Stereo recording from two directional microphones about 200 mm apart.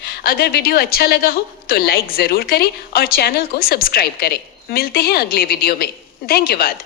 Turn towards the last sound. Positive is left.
turn(degrees=50)  # may be behind; listen again after turning